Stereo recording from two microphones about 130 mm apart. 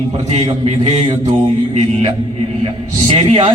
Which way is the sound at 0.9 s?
55° right (ahead or behind).